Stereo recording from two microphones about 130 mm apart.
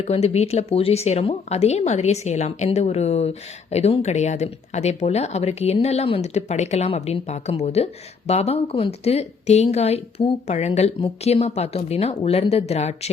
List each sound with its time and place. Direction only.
0.0 s a woman's voice: 55° left (ahead or behind)